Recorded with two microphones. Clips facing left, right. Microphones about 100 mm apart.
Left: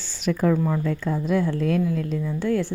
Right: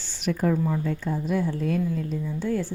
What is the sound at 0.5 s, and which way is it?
Speech, 75° left (ahead or behind).